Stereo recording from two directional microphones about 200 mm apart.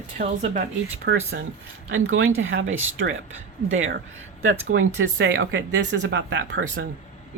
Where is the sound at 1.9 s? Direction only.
90° right.